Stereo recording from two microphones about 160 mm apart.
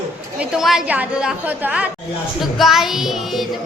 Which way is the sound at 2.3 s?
Centre (ahead or behind).